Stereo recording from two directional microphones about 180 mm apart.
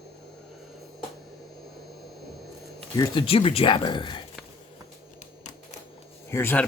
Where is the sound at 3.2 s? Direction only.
30° left (ahead or behind).